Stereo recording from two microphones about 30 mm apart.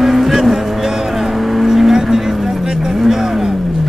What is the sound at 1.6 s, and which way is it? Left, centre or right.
Vehicle, centre.